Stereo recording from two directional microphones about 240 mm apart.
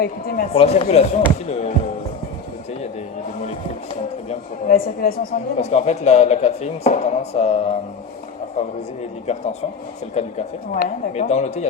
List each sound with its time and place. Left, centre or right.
0.0 s speech: left
0.5 s speech: left
4.3 s speech: left
9.2 s speech: left